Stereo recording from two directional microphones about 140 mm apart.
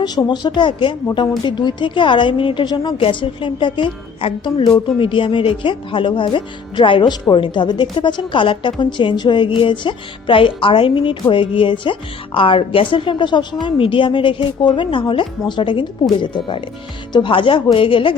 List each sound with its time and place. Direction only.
0.0 s a woman's voice: 30° left (ahead or behind)